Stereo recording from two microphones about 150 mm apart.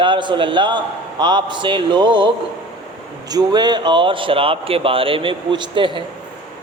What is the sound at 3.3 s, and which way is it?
A man's voice, 25° right (ahead or behind).